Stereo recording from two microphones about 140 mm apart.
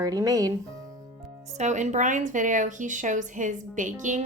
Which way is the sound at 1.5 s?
55° right (ahead or behind).